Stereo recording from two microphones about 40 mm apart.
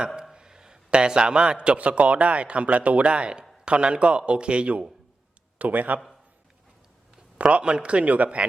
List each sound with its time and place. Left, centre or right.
0.3 s a man's voice: centre
5.5 s speech: right
7.3 s speech: right